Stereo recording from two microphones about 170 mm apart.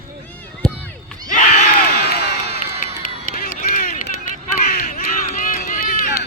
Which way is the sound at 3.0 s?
55° left (ahead or behind).